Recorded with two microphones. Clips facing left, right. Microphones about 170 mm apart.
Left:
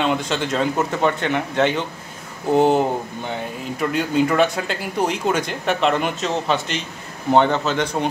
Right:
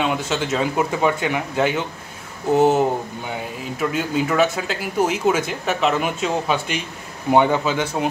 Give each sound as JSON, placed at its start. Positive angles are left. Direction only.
{"t": 0.0, "sound": "speech", "side_deg": -5}